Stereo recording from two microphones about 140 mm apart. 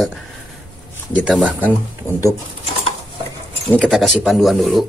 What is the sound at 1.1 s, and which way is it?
Speech, centre (ahead or behind).